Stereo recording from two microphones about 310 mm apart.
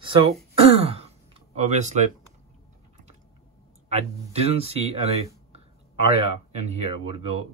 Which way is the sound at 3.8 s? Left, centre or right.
Right.